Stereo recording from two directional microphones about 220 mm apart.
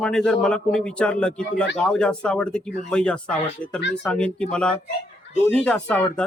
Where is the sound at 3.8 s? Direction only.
55° left (ahead or behind).